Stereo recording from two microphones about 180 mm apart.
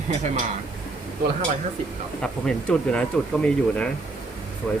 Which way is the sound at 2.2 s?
5° left (ahead or behind).